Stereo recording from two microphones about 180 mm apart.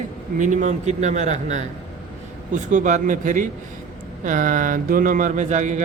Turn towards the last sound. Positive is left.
turn(degrees=-40)  # may be behind; listen again after turning